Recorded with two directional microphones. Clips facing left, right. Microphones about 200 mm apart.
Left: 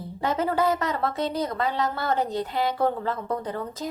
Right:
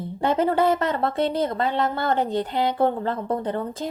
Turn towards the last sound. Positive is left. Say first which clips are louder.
# right 4 dB
turn(degrees=-25)  # may be behind; listen again after turning